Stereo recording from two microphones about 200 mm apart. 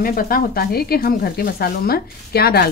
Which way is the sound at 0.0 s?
45° left (ahead or behind).